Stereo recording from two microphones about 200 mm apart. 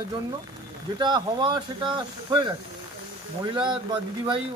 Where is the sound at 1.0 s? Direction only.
20° right (ahead or behind).